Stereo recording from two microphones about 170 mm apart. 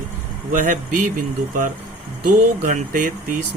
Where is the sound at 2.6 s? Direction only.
50° right (ahead or behind).